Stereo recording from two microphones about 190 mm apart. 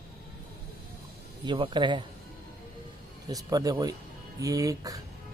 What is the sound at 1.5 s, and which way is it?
Speech, 25° right (ahead or behind).